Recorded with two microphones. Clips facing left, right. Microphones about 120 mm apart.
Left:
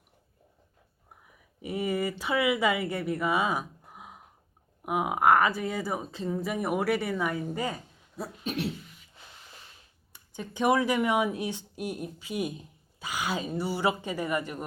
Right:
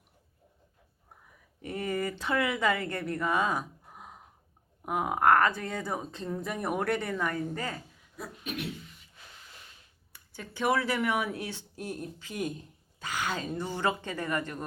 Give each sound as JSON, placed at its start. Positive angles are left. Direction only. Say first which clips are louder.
{"t": 1.6, "sound": "speech", "louder": "left 3 dB", "side_deg": 10}
{"t": 8.1, "sound": "a sound", "louder": "left 4 dB", "side_deg": 30}
{"t": 10.1, "sound": "speech", "louder": "left 5 dB", "side_deg": 20}